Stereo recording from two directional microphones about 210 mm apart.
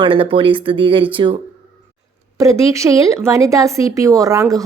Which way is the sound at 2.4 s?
15° right (ahead or behind).